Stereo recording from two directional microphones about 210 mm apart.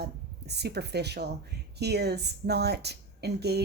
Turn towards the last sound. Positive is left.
turn(degrees=-50)  # may be behind; listen again after turning